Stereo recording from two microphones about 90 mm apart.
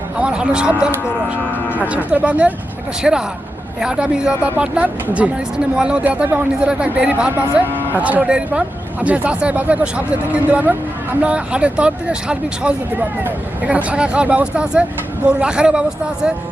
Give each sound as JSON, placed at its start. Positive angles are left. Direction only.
{"t": 0.2, "sound": "speech", "side_deg": -10}